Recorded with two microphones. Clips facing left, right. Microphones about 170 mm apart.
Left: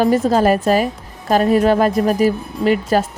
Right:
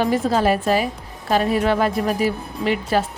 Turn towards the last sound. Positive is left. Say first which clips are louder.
# left 5 dB
turn(degrees=45)  # may be behind; listen again after turning